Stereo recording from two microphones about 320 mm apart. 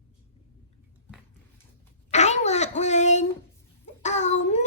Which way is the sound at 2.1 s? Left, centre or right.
Left.